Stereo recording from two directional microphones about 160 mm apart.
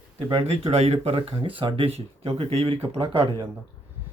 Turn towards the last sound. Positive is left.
turn(degrees=-30)  # may be behind; listen again after turning